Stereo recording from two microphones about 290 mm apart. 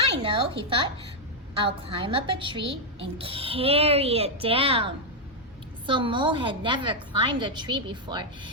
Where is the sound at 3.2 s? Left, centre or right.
Centre.